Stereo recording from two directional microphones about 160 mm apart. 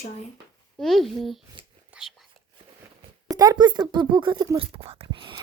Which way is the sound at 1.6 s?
35° right (ahead or behind).